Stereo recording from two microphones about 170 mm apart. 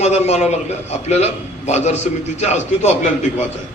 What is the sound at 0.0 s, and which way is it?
A man's voice, 40° left (ahead or behind).